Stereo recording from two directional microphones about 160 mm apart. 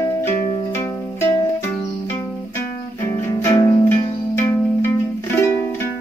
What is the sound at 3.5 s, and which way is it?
Music, 20° left (ahead or behind).